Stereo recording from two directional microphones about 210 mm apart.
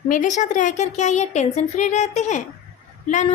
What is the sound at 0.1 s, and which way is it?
A woman's voice, 35° left (ahead or behind).